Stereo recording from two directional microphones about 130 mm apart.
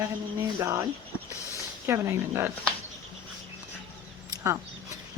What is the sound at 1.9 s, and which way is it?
Speech, 20° right (ahead or behind).